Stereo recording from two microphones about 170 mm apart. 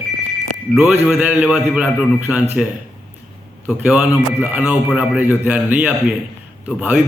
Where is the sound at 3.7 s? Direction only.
5° right (ahead or behind).